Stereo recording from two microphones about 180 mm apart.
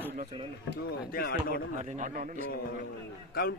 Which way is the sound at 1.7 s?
45° right (ahead or behind).